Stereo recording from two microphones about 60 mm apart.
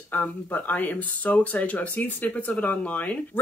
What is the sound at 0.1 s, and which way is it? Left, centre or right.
Speech, left.